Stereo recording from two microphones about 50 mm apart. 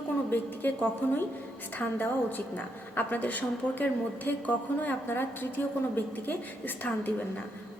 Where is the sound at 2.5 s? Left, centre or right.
Left.